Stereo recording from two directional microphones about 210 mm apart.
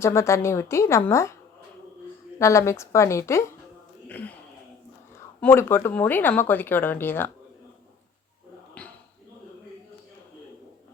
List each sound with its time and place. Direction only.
0.0 s speech: 15° left (ahead or behind)
2.4 s speech: 15° left (ahead or behind)
5.4 s speech: 10° left (ahead or behind)